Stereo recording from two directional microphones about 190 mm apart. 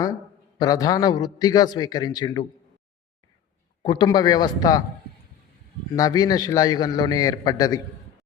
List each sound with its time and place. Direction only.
0.6 s a man's voice: 20° left (ahead or behind)
3.8 s a man's voice: 20° left (ahead or behind)
6.0 s a man's voice: 20° left (ahead or behind)